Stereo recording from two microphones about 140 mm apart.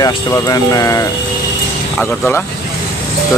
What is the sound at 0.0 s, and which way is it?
Speech, 25° left (ahead or behind).